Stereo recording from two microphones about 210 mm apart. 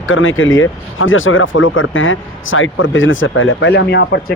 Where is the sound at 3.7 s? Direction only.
50° left (ahead or behind).